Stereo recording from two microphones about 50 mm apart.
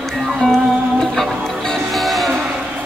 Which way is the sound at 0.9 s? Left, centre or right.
Centre.